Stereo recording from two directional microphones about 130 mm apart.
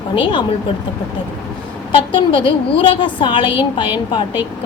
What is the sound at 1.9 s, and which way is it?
A woman's voice, 40° left (ahead or behind).